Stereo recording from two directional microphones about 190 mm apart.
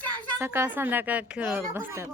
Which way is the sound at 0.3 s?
15° right (ahead or behind).